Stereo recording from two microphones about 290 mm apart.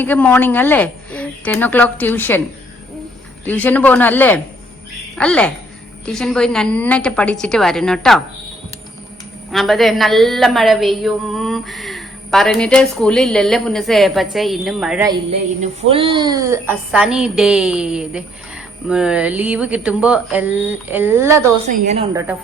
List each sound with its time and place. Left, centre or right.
0.0 s speech: centre
3.4 s a woman's voice: centre
9.5 s a woman's voice: centre
15.0 s a woman's voice: centre
21.7 s a woman's voice: right
22.1 s speech: centre